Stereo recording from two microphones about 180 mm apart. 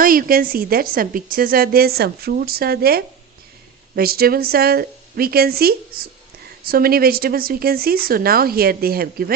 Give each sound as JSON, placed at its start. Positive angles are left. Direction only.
{"t": 0.0, "sound": "a woman's voice", "side_deg": -50}